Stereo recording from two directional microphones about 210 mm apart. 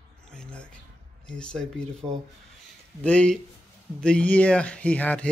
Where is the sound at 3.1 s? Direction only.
5° left (ahead or behind).